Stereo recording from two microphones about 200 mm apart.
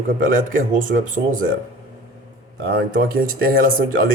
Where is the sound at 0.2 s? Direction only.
40° right (ahead or behind).